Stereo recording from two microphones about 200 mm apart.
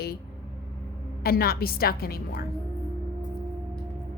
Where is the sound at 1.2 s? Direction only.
50° left (ahead or behind).